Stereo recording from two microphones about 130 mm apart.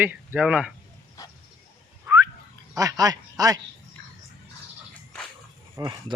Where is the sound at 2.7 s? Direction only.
25° right (ahead or behind).